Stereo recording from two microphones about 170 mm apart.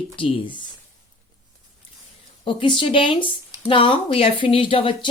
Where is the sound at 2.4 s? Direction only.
30° left (ahead or behind).